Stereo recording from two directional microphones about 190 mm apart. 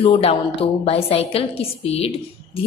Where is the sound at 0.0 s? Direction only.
30° left (ahead or behind).